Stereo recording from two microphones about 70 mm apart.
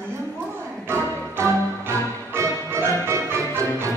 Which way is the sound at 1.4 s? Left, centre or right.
Right.